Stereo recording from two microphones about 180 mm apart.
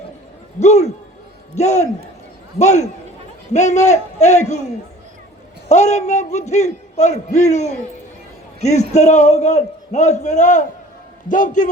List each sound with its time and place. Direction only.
0.6 s a man's voice: 40° left (ahead or behind)